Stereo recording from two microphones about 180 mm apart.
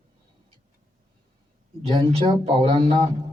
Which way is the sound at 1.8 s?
30° right (ahead or behind).